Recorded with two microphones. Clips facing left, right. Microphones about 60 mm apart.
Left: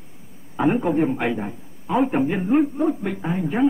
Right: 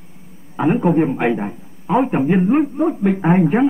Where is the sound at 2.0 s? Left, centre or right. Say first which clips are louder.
Right 4 dB; centre.